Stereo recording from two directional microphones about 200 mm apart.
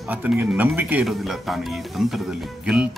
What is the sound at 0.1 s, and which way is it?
Speech, 5° right (ahead or behind).